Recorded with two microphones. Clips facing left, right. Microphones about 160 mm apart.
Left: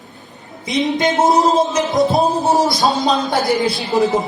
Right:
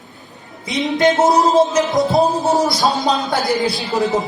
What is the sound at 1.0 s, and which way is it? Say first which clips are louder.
Music: right 2 dB; 20° left (ahead or behind).